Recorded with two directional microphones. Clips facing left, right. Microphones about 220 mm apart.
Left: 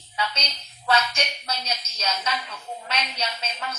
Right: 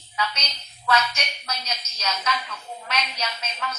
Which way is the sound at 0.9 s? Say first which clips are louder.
Even; 30° left (ahead or behind).